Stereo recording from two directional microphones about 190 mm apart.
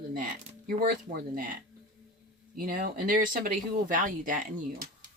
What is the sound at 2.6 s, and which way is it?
Speech, 45° right (ahead or behind).